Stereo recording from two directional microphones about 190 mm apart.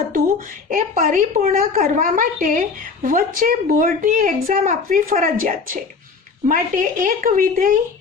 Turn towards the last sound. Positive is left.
turn(degrees=-45)  # may be behind; listen again after turning